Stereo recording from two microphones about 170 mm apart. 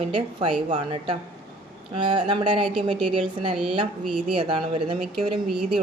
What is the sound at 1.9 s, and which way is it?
Speech, 30° right (ahead or behind).